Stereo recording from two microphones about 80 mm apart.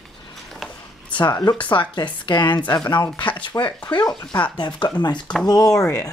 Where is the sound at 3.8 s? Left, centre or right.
Left.